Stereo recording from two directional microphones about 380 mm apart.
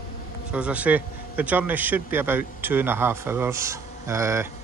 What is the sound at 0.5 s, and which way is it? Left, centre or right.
A man's voice, centre.